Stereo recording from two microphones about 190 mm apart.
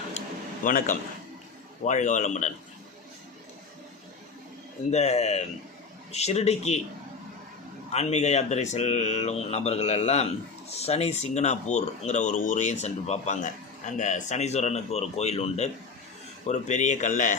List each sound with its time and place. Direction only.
0.6 s a man's voice: 45° left (ahead or behind)
4.9 s speech: 35° left (ahead or behind)
7.9 s speech: 35° left (ahead or behind)